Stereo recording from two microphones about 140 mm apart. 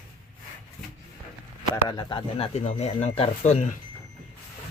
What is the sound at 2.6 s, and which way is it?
Speech, 50° left (ahead or behind).